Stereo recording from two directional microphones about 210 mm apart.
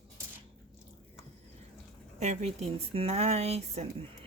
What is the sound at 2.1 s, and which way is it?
Speech, 30° right (ahead or behind).